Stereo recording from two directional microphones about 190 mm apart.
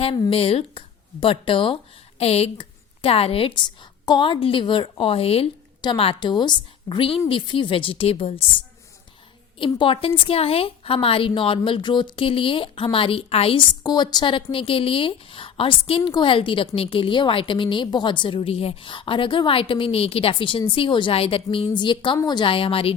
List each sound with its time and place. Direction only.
0.0 s a woman's voice: 30° left (ahead or behind)
9.6 s a woman's voice: 25° left (ahead or behind)